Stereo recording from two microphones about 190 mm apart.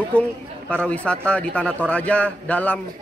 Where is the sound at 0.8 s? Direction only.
5° left (ahead or behind).